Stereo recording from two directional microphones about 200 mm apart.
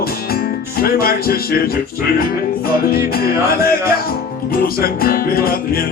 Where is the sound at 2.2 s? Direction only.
50° left (ahead or behind).